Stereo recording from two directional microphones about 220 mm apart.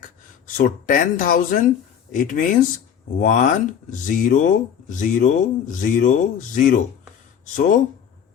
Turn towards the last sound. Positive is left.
turn(degrees=35)  # may be behind; listen again after turning